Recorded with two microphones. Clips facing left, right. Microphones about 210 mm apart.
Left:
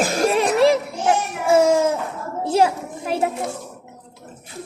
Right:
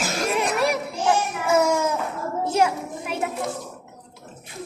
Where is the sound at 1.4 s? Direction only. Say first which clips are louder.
Left 6 dB; 30° left (ahead or behind).